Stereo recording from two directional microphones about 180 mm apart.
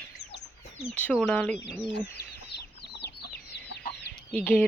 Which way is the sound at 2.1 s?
65° left (ahead or behind).